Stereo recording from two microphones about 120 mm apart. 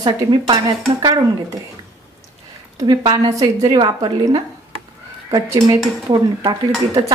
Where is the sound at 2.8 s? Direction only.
40° right (ahead or behind).